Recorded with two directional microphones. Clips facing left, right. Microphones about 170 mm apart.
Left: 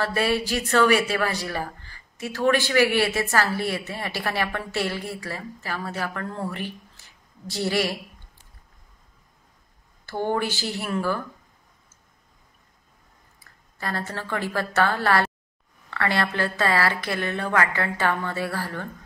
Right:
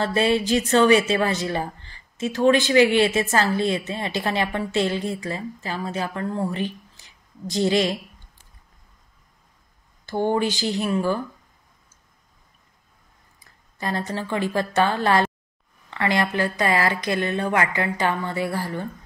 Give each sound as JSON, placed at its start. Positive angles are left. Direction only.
{"t": 0.0, "sound": "a woman's voice", "side_deg": -20}
{"t": 10.0, "sound": "speech", "side_deg": -20}
{"t": 13.4, "sound": "a woman's voice", "side_deg": -20}